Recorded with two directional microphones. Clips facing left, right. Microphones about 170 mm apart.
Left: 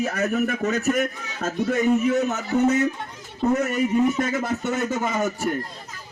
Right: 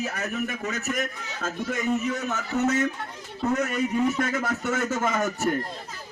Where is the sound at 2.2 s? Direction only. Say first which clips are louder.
Left 5 dB; 20° left (ahead or behind).